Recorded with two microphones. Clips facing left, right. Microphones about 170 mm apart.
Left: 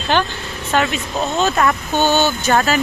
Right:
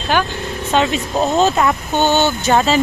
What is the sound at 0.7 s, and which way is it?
Speech, 20° right (ahead or behind).